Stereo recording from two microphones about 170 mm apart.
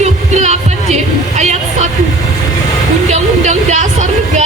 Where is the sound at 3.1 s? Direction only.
45° right (ahead or behind).